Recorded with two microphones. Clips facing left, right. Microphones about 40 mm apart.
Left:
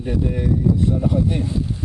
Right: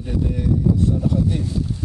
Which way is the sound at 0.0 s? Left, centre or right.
Left.